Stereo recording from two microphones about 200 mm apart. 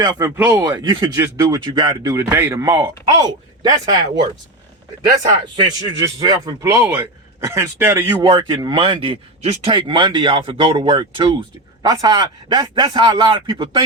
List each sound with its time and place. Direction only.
0.0 s speech: 20° right (ahead or behind)
0.3 s speech: 5° right (ahead or behind)
5.3 s speech: 20° right (ahead or behind)